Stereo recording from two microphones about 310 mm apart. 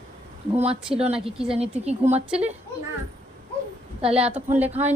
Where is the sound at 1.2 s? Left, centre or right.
Centre.